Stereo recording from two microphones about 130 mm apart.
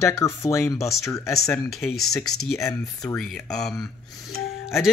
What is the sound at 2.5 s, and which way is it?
Speech, 25° left (ahead or behind).